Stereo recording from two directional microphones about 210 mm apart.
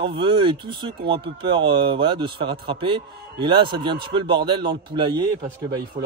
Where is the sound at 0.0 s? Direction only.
25° right (ahead or behind).